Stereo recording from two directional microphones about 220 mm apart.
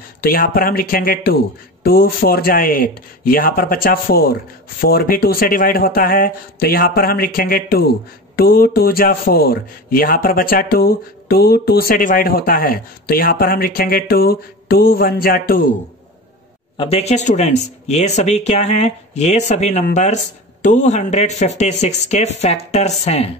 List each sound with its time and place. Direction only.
0.2 s a man's voice: 45° left (ahead or behind)
16.7 s speech: 25° left (ahead or behind)